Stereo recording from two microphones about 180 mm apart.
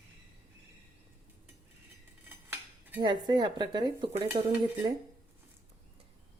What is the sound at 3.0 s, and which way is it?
A woman's voice, 25° right (ahead or behind).